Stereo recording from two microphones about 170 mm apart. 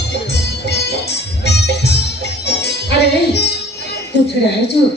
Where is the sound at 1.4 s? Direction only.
80° left.